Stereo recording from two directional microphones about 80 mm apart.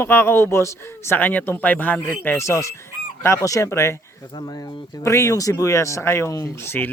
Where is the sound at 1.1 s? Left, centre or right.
Left.